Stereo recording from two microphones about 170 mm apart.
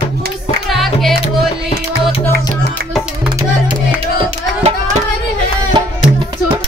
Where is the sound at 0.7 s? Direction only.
Centre (ahead or behind).